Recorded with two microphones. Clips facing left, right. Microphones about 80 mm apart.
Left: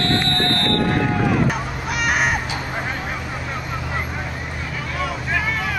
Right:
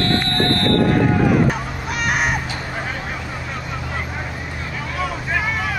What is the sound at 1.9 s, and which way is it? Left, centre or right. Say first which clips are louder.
Vehicle: even; centre.